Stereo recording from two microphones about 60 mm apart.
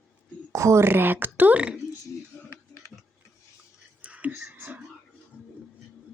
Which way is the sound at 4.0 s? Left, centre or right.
Right.